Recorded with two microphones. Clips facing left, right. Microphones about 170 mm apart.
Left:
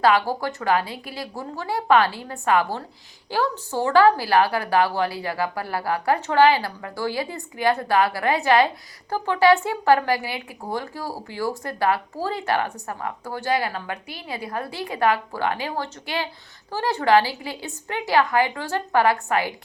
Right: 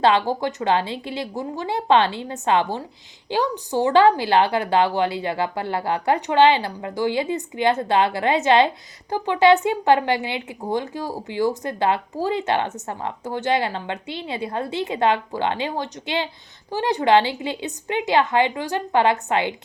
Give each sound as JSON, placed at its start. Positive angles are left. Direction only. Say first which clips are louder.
{"t": 0.0, "sound": "a woman's voice", "louder": "right 1 dB", "side_deg": -25}